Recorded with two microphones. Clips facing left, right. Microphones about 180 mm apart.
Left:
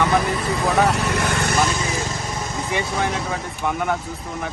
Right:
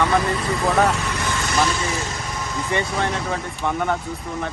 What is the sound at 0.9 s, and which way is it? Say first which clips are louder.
Vehicle: left 3 dB; 65° left (ahead or behind).